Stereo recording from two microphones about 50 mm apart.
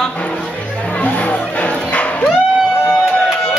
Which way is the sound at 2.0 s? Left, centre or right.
Left.